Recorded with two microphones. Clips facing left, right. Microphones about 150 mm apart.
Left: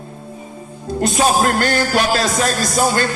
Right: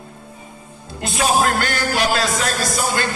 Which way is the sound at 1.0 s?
40° left (ahead or behind).